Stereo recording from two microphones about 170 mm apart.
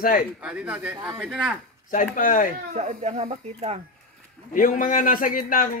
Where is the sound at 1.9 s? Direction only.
50° left (ahead or behind).